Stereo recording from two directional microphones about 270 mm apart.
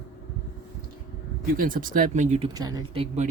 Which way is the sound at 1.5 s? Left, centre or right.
Right.